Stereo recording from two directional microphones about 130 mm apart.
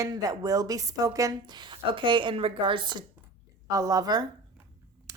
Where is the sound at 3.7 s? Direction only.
25° right (ahead or behind).